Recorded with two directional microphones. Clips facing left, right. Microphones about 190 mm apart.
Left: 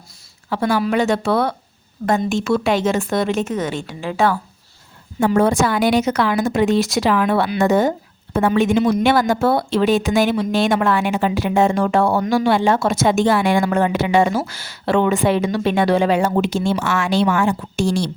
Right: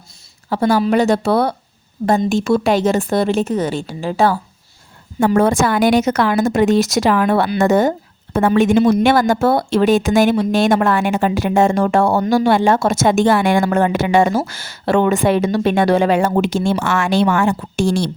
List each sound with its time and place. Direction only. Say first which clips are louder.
0.5 s a woman's voice: right 3 dB; 40° right (ahead or behind)
5.2 s speech: right 2 dB; 50° right (ahead or behind)
8.8 s a woman's voice: right 4 dB; 35° right (ahead or behind)
9.0 s speech: right 2 dB; 45° right (ahead or behind)